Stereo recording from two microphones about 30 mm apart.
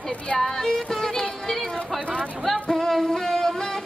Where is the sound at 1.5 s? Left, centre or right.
Centre.